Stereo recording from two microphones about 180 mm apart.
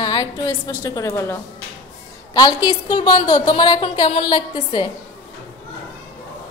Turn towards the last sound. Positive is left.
turn(degrees=25)  # may be behind; listen again after turning